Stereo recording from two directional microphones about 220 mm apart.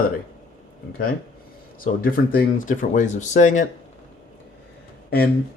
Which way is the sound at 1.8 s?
40° left (ahead or behind).